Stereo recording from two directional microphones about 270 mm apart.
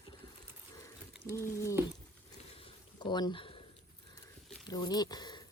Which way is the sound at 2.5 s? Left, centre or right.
Centre.